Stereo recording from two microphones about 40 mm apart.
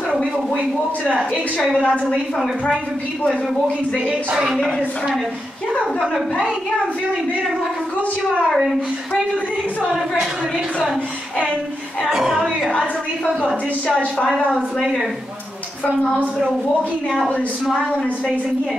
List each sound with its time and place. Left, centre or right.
1.6 s speech: centre
4.0 s speech: right
4.6 s speech: left
12.1 s speech: centre
14.3 s speech: centre